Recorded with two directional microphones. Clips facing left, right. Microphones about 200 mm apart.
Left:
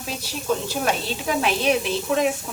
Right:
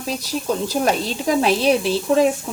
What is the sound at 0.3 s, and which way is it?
Speech, 40° right (ahead or behind).